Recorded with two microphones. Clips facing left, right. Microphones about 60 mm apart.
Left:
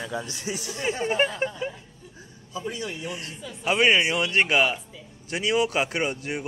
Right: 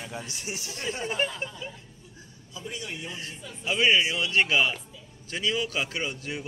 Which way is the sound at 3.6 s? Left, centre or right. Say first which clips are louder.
Left 3 dB; left.